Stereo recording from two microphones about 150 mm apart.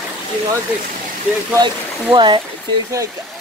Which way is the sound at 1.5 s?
30° right (ahead or behind).